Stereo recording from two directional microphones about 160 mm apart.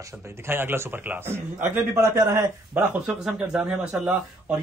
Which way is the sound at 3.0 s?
5° right (ahead or behind).